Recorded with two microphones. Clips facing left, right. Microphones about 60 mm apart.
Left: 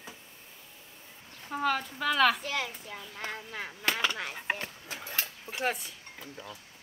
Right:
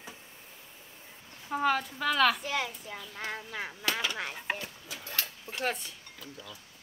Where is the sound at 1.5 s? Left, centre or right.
Centre.